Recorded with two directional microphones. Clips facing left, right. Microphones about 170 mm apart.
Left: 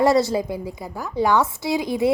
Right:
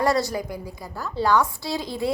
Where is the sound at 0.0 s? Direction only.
20° left (ahead or behind).